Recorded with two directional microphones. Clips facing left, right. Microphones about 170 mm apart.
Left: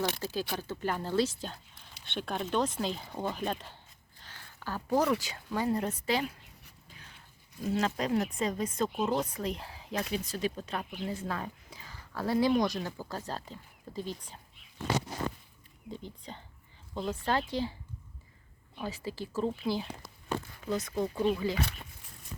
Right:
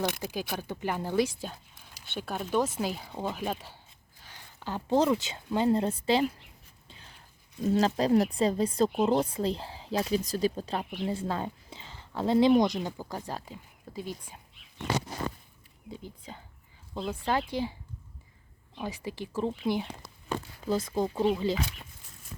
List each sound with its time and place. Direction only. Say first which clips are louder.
0.1 s speech: even; 15° right (ahead or behind)
6.8 s dog: right 2 dB; 30° right (ahead or behind)
7.6 s a woman's voice: right 5 dB; 35° right (ahead or behind); by 14.3 s 10° right (ahead or behind)
15.9 s speech: even; 5° right (ahead or behind)
18.8 s speech: right 1 dB; 15° right (ahead or behind)
20.7 s speech: right 4 dB; 30° right (ahead or behind)